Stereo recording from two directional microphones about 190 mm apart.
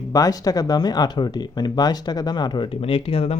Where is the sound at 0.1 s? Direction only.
20° left (ahead or behind).